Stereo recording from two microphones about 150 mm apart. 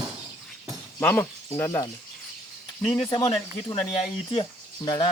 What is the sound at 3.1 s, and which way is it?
Speech, 30° left (ahead or behind).